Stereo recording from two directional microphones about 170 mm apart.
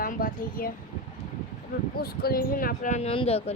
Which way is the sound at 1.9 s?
65° left (ahead or behind).